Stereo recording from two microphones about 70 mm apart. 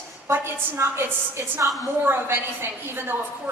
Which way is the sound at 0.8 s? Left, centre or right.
Right.